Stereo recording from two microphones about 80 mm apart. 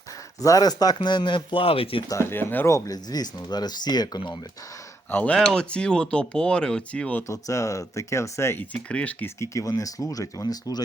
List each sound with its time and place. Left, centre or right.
0.4 s speech: left
0.9 s speech: left
1.5 s speech: left
2.0 s speech: left
2.6 s speech: left
5.1 s speech: centre
7.3 s speech: left
8.7 s speech: centre
9.2 s speech: left